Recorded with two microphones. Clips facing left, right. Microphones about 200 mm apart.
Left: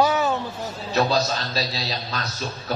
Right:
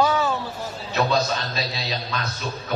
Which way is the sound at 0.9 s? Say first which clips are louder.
Left 1 dB; 35° left (ahead or behind).